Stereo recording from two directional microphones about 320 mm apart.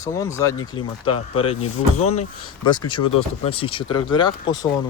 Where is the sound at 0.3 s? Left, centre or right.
Centre.